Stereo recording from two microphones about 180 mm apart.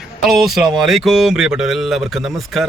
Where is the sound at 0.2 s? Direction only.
Centre (ahead or behind).